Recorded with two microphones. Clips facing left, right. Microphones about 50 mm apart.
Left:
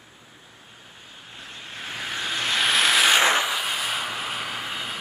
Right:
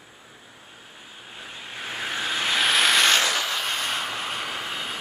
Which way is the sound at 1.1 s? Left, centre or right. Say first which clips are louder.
Right 1 dB; centre.